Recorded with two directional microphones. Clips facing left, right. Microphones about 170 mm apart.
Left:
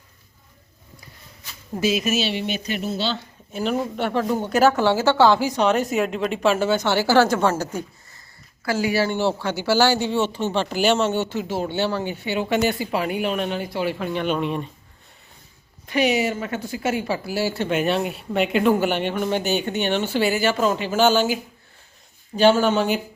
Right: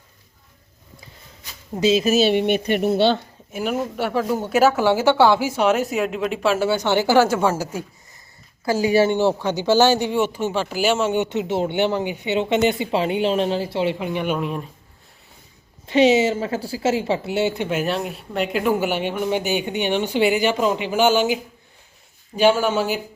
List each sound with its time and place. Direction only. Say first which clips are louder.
1.7 s speech: right 4 dB; 25° right (ahead or behind); by 3.2 s 60° right (ahead or behind)
3.5 s speech: even; 10° right (ahead or behind)
8.6 s a woman's voice: right 4 dB; 20° right (ahead or behind)
14.0 s speech: even; 15° right (ahead or behind)
15.9 s a woman's voice: right 5 dB; 25° right (ahead or behind)
17.7 s speech: left 2 dB; centre (ahead or behind)
22.4 s speech: left 1 dB; 10° right (ahead or behind)